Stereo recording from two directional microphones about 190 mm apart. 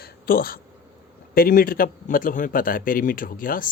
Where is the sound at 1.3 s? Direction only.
50° left (ahead or behind).